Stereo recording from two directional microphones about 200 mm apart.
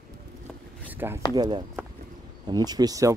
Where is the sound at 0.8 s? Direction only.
10° right (ahead or behind).